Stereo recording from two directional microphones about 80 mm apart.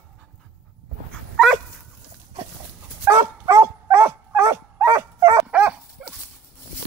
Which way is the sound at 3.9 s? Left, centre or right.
Right.